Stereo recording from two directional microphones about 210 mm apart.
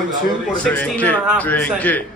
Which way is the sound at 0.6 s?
5° left (ahead or behind).